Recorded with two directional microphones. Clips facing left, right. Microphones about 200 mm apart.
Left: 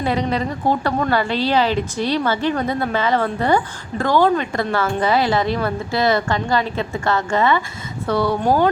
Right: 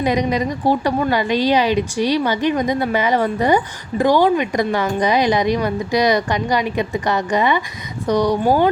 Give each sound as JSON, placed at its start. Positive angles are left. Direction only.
{"t": 0.0, "sound": "a woman's voice", "side_deg": -15}